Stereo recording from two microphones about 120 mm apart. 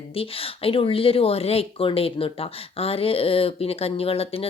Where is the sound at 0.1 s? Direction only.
50° left (ahead or behind).